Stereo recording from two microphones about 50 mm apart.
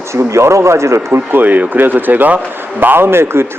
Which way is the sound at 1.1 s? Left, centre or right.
Right.